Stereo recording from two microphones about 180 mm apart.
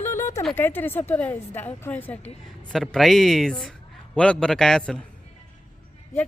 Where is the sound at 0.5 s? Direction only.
10° left (ahead or behind).